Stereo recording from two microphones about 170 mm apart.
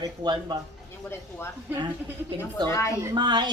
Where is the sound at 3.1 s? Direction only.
25° right (ahead or behind).